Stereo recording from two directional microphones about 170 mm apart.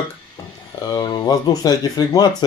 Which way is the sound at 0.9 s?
25° left (ahead or behind).